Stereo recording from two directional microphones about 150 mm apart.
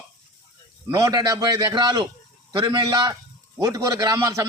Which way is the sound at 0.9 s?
25° right (ahead or behind).